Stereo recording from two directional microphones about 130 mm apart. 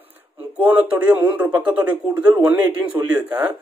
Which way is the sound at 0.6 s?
10° right (ahead or behind).